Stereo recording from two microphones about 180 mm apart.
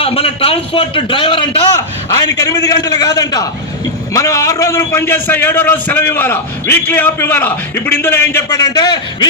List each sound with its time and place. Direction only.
0.0 s a man's voice: 30° left (ahead or behind)